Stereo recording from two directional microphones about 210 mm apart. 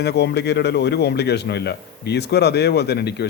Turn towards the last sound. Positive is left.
turn(degrees=50)  # may be behind; listen again after turning